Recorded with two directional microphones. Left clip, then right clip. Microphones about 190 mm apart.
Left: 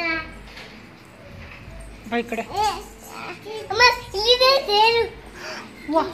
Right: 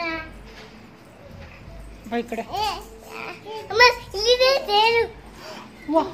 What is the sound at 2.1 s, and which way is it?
Speech, 10° right (ahead or behind).